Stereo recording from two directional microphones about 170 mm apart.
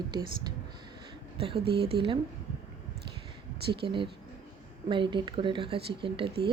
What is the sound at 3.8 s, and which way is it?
A woman's voice, 30° right (ahead or behind).